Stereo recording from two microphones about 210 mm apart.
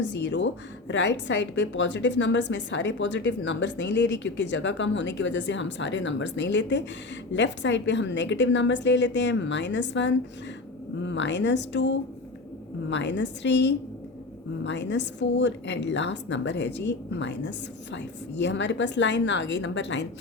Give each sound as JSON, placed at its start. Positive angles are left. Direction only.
{"t": 0.0, "sound": "a woman's voice", "side_deg": 60}